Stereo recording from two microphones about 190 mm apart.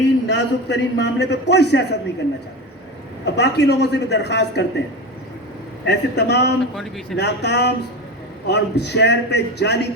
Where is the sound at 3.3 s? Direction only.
60° left (ahead or behind).